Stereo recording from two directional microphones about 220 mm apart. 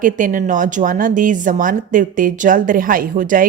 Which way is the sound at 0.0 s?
35° right (ahead or behind).